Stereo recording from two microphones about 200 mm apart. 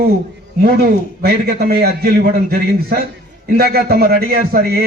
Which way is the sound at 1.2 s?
50° right (ahead or behind).